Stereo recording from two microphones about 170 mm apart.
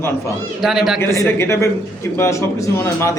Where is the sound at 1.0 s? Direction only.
15° left (ahead or behind).